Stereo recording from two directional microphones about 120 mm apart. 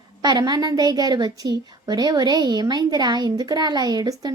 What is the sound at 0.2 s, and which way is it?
A woman's voice, 35° right (ahead or behind).